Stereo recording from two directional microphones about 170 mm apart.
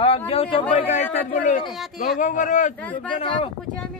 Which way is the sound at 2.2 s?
50° left (ahead or behind).